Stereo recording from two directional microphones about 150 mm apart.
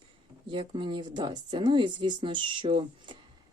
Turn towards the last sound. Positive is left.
turn(degrees=-35)  # may be behind; listen again after turning